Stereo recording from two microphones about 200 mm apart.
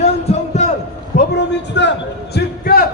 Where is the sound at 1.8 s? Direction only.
60° left (ahead or behind).